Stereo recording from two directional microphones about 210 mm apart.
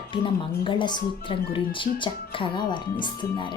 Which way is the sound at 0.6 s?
25° left (ahead or behind).